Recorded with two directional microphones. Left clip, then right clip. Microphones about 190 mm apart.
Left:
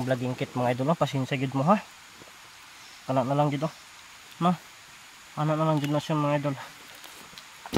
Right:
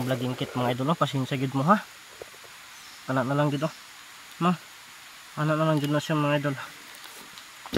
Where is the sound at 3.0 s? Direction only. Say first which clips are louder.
Left 1 dB; 15° left (ahead or behind).